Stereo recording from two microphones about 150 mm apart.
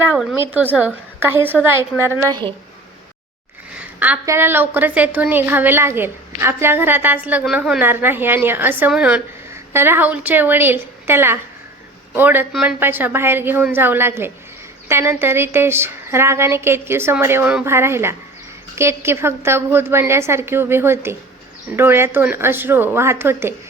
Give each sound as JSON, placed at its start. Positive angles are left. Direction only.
{"t": 0.5, "sound": "a woman's voice", "side_deg": -10}
{"t": 3.8, "sound": "a sound", "side_deg": -10}
{"t": 4.3, "sound": "a woman's voice", "side_deg": -15}